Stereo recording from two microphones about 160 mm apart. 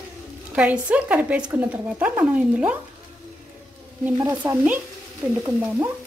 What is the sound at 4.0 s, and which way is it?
Speech, 10° right (ahead or behind).